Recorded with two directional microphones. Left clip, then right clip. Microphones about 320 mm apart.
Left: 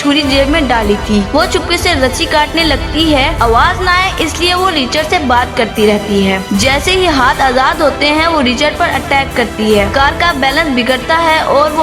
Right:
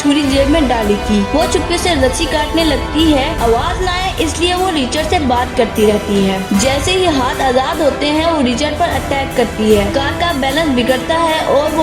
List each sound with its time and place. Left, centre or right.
0.1 s music: centre
1.4 s a woman's voice: centre
4.9 s a woman's voice: centre